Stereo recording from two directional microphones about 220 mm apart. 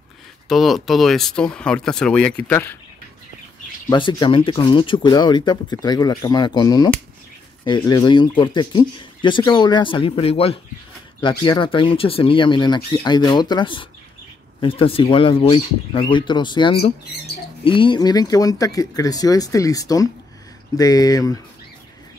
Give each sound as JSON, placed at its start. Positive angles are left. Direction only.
{"t": 0.5, "sound": "speech", "side_deg": 0}
{"t": 3.9, "sound": "speech", "side_deg": 20}